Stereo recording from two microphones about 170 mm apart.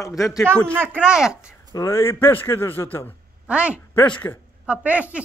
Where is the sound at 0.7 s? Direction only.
10° right (ahead or behind).